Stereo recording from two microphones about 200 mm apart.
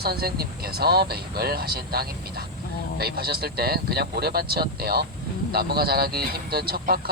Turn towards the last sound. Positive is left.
turn(degrees=-50)  # may be behind; listen again after turning